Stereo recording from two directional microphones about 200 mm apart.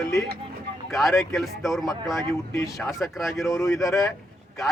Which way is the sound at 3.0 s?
Centre (ahead or behind).